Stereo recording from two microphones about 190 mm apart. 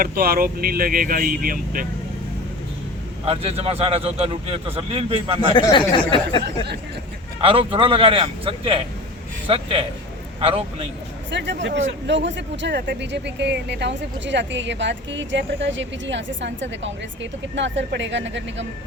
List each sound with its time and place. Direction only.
0.0 s speech: 50° right (ahead or behind)
3.2 s a man's voice: 30° right (ahead or behind)
5.5 s speech: 25° left (ahead or behind)
7.4 s a man's voice: 30° right (ahead or behind)
11.3 s speech: 70° right (ahead or behind)